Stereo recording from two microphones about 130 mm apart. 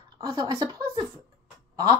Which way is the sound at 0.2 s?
30° right (ahead or behind).